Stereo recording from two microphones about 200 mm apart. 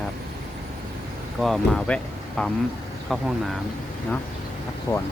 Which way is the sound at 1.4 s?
5° left (ahead or behind).